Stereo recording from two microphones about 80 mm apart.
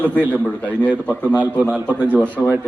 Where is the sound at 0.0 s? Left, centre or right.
Left.